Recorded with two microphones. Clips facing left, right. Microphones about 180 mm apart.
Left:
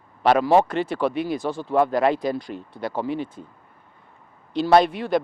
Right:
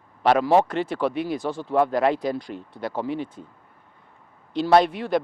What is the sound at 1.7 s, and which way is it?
Speech, 15° left (ahead or behind).